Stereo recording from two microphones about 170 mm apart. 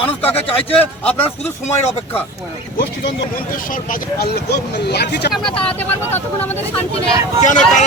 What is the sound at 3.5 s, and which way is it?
Speech, 55° left (ahead or behind).